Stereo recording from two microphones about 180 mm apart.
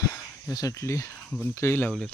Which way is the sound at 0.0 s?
20° left (ahead or behind).